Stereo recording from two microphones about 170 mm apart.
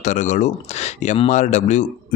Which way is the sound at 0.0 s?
45° left (ahead or behind).